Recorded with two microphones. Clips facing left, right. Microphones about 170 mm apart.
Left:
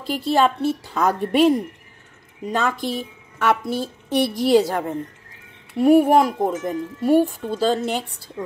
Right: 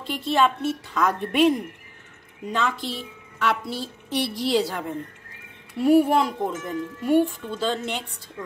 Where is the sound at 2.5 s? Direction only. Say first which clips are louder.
Left 4 dB; 45° left (ahead or behind).